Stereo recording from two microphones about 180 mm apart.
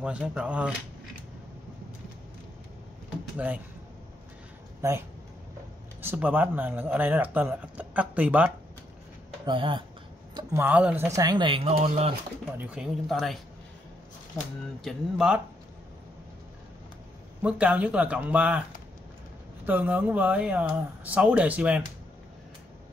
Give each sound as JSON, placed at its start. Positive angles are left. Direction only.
{"t": 0.0, "sound": "speech", "side_deg": -5}
{"t": 3.3, "sound": "speech", "side_deg": -10}
{"t": 5.9, "sound": "speech", "side_deg": -10}
{"t": 9.5, "sound": "speech", "side_deg": -25}
{"t": 10.3, "sound": "speech", "side_deg": -15}
{"t": 11.1, "sound": "speech", "side_deg": -20}
{"t": 12.5, "sound": "speech", "side_deg": -5}
{"t": 14.8, "sound": "speech", "side_deg": 0}
{"t": 17.4, "sound": "speech", "side_deg": -10}
{"t": 19.6, "sound": "speech", "side_deg": -10}